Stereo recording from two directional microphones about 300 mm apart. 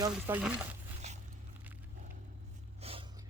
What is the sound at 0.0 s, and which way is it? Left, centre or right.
Stir, centre.